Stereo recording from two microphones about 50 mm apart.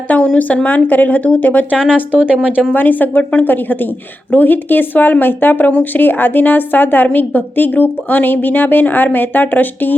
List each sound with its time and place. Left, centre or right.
0.3 s a woman's voice: left
1.7 s speech: centre
2.7 s a woman's voice: left